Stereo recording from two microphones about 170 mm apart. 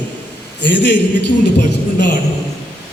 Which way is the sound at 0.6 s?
90° left.